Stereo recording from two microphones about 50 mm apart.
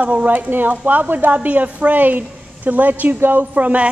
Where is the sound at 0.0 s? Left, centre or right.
Right.